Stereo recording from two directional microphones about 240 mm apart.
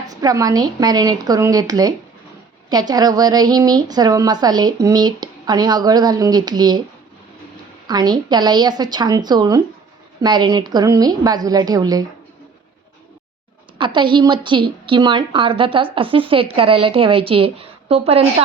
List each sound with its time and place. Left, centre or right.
0.1 s a woman's voice: centre
7.9 s a woman's voice: centre
13.7 s a woman's voice: centre